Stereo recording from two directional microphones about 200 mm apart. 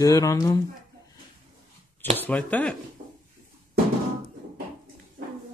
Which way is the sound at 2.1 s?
10° left (ahead or behind).